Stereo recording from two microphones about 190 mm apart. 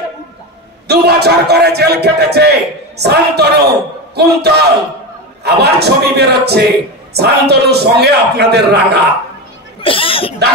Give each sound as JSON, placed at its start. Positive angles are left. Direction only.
{"t": 0.8, "sound": "a man's voice", "side_deg": -60}
{"t": 9.8, "sound": "speech", "side_deg": 30}